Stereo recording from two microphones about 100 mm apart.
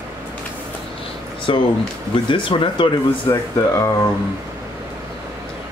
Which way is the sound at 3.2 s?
30° left (ahead or behind).